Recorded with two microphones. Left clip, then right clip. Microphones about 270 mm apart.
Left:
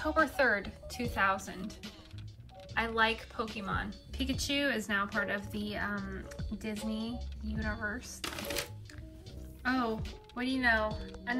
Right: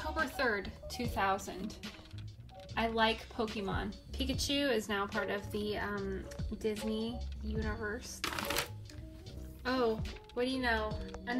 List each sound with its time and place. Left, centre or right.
0.2 s speech: centre
4.2 s speech: centre
10.9 s speech: centre